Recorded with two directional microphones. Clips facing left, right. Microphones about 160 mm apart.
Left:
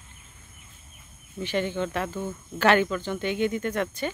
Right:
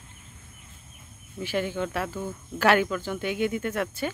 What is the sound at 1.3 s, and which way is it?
Speech, 5° right (ahead or behind).